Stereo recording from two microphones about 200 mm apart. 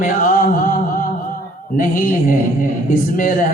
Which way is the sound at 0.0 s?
45° left (ahead or behind).